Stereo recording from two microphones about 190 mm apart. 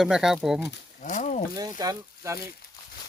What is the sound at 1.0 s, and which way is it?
Speech, 40° left (ahead or behind).